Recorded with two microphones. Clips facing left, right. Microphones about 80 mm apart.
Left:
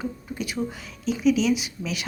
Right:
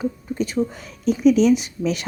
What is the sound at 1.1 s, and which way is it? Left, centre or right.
Speech, right.